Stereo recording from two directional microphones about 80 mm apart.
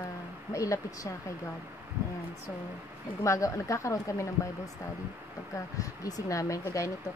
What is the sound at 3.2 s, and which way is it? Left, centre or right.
Speech, left.